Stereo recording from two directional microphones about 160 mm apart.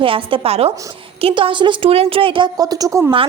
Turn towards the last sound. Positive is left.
turn(degrees=-20)  # may be behind; listen again after turning